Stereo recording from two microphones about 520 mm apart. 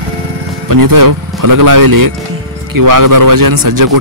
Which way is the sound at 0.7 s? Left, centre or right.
Right.